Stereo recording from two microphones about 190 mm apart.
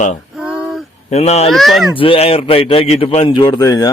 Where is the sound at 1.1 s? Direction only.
35° left (ahead or behind).